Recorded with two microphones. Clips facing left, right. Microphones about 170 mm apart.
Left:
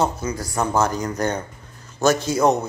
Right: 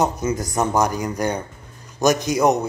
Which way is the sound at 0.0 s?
20° right (ahead or behind).